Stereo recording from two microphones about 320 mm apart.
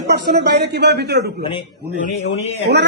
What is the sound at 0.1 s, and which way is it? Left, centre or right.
Speech, right.